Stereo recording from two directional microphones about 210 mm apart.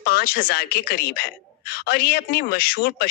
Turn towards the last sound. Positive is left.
turn(degrees=45)  # may be behind; listen again after turning